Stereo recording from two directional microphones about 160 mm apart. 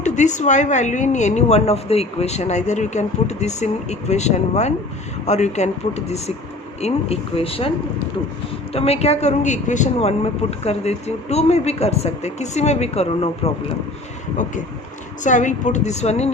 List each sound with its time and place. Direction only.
0.0 s a woman's voice: 50° left (ahead or behind)
8.7 s speech: 40° left (ahead or behind)
15.2 s a woman's voice: 50° left (ahead or behind)